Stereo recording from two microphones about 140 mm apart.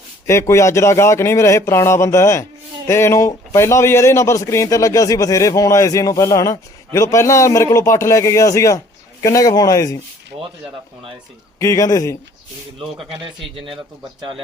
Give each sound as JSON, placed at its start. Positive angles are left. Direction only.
{"t": 0.3, "sound": "a man's voice", "side_deg": 20}
{"t": 11.6, "sound": "a man's voice", "side_deg": 25}